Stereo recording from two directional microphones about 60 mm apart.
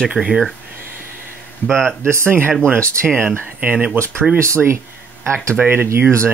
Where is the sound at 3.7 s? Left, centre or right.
Right.